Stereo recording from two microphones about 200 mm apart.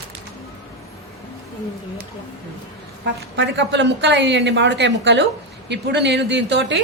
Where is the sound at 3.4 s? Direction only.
60° right (ahead or behind).